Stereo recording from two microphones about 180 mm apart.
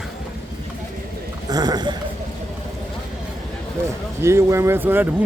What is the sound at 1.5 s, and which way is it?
Speech, 20° right (ahead or behind).